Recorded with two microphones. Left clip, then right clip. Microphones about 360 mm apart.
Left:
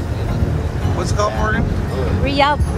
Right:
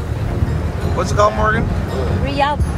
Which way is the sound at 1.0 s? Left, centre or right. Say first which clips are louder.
Right 5 dB; centre.